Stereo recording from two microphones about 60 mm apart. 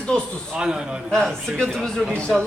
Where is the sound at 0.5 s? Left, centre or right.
Centre.